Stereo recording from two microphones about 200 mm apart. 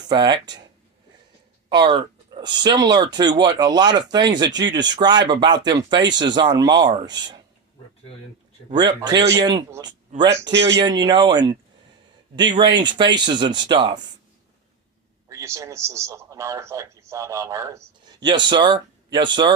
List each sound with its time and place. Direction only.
0.1 s speech: 20° right (ahead or behind)
1.7 s speech: 25° right (ahead or behind)
8.7 s speech: 20° right (ahead or behind)
15.3 s a man's voice: 15° right (ahead or behind)